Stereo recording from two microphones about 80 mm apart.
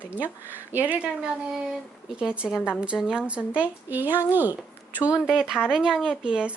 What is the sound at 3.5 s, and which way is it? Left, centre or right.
Speech, centre.